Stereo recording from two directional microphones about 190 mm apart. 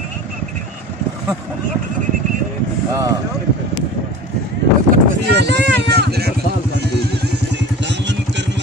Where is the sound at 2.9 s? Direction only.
15° right (ahead or behind).